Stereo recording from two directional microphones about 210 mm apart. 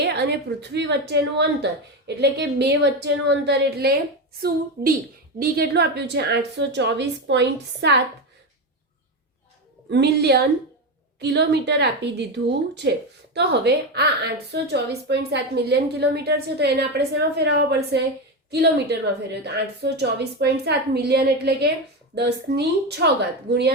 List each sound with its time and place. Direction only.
0.0 s a woman's voice: 50° right (ahead or behind)
9.9 s a woman's voice: 50° right (ahead or behind)